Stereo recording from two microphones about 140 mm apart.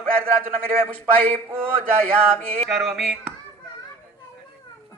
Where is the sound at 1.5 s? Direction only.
15° right (ahead or behind).